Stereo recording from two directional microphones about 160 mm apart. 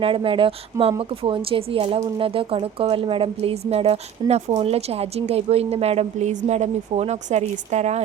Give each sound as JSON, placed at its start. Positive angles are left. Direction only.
{"t": 0.0, "sound": "a woman's voice", "side_deg": -35}